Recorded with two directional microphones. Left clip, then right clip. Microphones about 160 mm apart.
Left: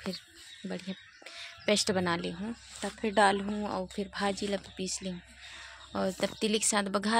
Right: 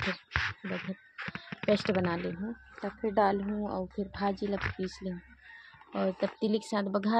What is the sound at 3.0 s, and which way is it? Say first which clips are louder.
Speech: left 2 dB; 20° left (ahead or behind).